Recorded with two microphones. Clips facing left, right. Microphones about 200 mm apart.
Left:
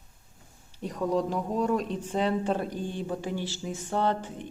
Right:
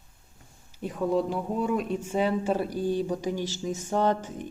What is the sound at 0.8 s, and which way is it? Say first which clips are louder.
Speech: right 1 dB; 5° right (ahead or behind).